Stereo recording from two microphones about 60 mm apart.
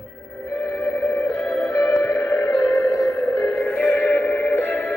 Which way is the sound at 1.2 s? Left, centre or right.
Left.